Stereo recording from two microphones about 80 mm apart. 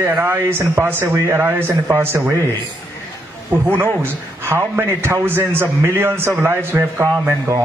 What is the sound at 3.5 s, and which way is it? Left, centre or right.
A man's voice, right.